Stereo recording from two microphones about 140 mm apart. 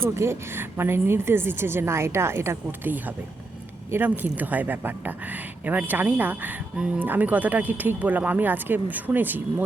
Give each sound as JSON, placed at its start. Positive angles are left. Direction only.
{"t": 0.0, "sound": "speech", "side_deg": -15}